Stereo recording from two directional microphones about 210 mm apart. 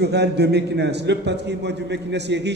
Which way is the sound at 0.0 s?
50° right (ahead or behind).